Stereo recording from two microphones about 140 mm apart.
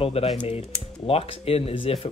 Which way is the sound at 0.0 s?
45° left (ahead or behind).